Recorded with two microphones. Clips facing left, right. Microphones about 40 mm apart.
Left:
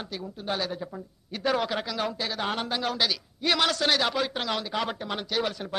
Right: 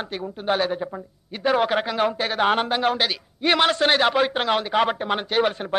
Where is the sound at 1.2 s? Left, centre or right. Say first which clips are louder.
Right 5 dB; right.